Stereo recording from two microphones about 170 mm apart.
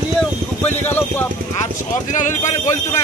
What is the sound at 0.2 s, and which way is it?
Vehicle, 10° left (ahead or behind).